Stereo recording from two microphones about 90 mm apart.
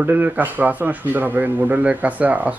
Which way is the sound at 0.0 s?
20° right (ahead or behind).